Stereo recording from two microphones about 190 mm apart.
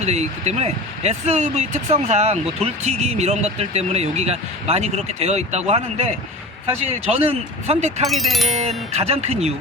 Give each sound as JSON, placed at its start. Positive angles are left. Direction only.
{"t": 0.0, "sound": "speech", "side_deg": -35}
{"t": 8.0, "sound": "speech", "side_deg": 0}
{"t": 8.9, "sound": "speech", "side_deg": -35}